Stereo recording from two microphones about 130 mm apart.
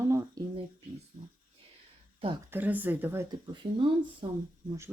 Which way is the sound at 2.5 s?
15° right (ahead or behind).